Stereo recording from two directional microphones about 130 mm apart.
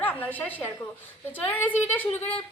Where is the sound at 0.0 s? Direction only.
15° left (ahead or behind).